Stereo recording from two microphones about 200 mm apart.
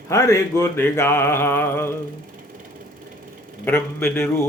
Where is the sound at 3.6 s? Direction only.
10° left (ahead or behind).